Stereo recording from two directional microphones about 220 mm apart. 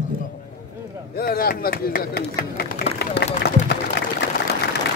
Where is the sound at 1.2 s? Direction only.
45° left (ahead or behind).